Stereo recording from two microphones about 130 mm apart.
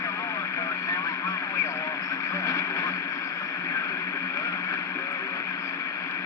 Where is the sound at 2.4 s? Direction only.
25° left (ahead or behind).